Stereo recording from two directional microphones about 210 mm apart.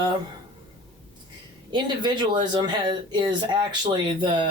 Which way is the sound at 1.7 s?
20° right (ahead or behind).